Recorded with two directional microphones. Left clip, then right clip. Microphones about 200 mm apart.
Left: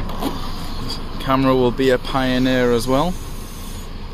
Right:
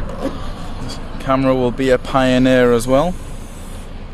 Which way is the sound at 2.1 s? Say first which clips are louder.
Right 5 dB; 25° right (ahead or behind).